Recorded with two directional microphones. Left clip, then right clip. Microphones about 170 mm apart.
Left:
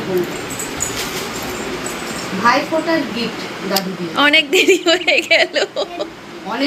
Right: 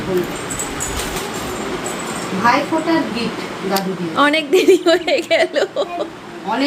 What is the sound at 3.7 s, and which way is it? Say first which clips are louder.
A woman's voice: even; 15° right (ahead or behind).